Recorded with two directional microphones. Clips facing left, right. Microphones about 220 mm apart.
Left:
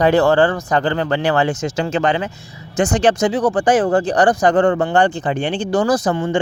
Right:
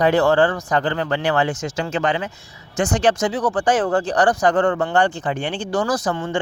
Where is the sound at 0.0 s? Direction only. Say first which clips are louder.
Left 3 dB; 30° left (ahead or behind).